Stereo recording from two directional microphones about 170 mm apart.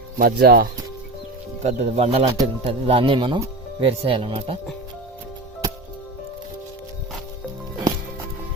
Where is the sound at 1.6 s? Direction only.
40° right (ahead or behind).